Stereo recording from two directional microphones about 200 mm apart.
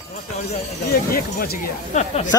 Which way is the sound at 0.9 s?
50° left (ahead or behind).